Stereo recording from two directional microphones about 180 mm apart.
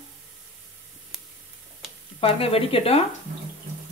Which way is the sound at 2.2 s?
30° left (ahead or behind).